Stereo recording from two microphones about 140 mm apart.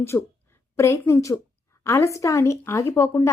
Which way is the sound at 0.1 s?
15° left (ahead or behind).